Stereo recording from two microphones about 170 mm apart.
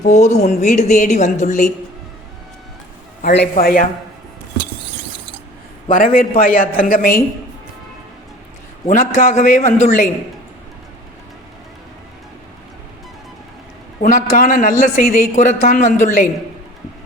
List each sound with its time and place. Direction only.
0.0 s speech: 40° left (ahead or behind)
3.5 s a woman's voice: 55° left (ahead or behind)
5.9 s a woman's voice: 55° left (ahead or behind)
8.9 s speech: 50° left (ahead or behind)
14.0 s speech: 45° left (ahead or behind)